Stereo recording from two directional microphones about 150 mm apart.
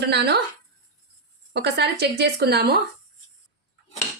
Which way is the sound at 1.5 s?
90° right.